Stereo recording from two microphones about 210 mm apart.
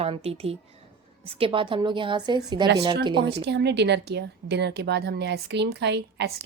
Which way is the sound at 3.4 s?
55° right (ahead or behind).